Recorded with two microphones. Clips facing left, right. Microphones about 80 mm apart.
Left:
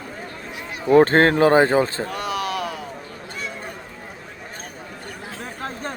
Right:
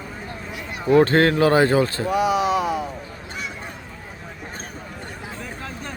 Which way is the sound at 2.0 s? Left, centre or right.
Centre.